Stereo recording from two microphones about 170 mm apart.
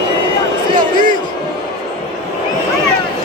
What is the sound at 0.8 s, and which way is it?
Basketball bounce, 55° right (ahead or behind).